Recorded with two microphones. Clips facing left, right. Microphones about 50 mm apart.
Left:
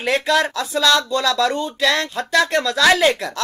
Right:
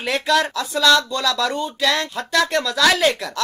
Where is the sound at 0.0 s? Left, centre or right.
Centre.